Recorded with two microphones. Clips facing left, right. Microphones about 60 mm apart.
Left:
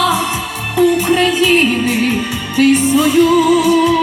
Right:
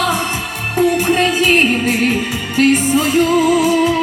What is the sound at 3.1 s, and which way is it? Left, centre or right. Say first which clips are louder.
Music: left 2 dB; right.